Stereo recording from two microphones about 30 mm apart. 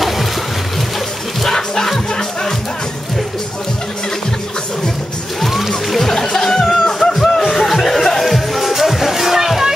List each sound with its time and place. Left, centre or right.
1.4 s music: centre
5.5 s music: centre